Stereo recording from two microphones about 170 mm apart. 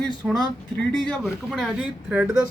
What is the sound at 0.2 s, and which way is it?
Speech, centre (ahead or behind).